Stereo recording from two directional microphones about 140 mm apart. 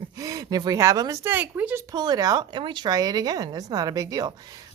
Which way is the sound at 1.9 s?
30° right (ahead or behind).